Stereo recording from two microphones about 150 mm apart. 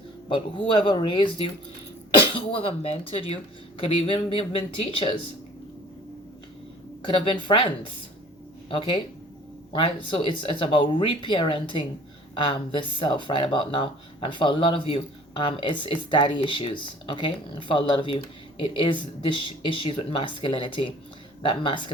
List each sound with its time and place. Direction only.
0.3 s speech: 35° left (ahead or behind)
7.2 s speech: 35° left (ahead or behind)
8.7 s speech: 35° left (ahead or behind)